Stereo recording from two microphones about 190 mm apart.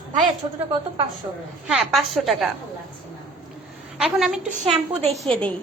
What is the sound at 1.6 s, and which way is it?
Speech, 5° right (ahead or behind).